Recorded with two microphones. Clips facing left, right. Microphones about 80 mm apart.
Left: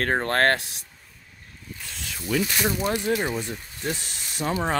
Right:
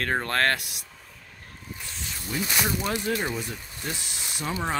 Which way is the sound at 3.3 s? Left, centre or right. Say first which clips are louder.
Left 3 dB; left.